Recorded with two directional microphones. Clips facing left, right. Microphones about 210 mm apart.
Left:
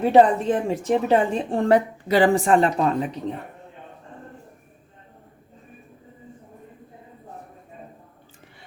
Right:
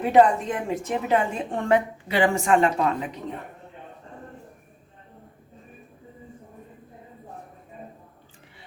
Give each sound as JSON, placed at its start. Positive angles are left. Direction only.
{"t": 0.0, "sound": "a woman's voice", "side_deg": 30}